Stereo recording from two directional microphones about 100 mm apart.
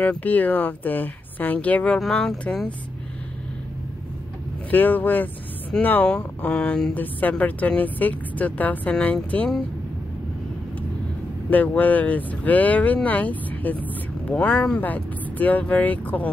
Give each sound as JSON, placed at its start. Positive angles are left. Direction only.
{"t": 0.0, "sound": "speech", "side_deg": 15}
{"t": 4.6, "sound": "speech", "side_deg": 15}
{"t": 11.5, "sound": "speech", "side_deg": 15}